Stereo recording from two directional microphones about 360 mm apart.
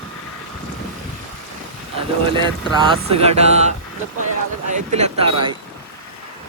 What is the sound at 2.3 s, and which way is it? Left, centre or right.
Speech, centre.